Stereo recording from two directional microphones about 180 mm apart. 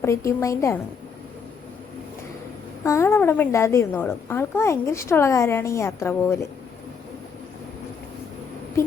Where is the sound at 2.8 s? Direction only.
15° left (ahead or behind).